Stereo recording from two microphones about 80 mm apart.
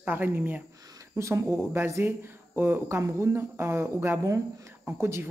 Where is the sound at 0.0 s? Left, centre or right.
Right.